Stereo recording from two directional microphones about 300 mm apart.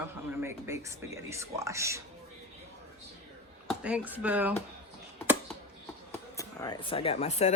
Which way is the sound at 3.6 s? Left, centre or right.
Centre.